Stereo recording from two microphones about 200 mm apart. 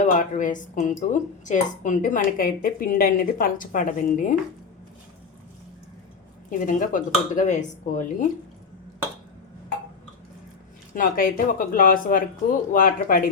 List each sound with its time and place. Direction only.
0.0 s a woman's voice: 40° left (ahead or behind)
6.5 s a woman's voice: 40° left (ahead or behind)
10.9 s speech: 45° left (ahead or behind)